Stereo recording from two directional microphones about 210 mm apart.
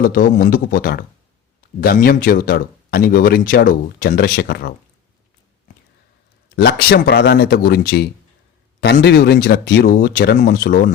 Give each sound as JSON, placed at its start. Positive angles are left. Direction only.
{"t": 0.0, "sound": "speech", "side_deg": 45}
{"t": 6.6, "sound": "speech", "side_deg": 50}